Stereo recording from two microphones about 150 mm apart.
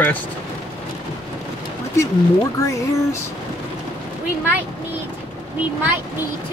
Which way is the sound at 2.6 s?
20° left (ahead or behind).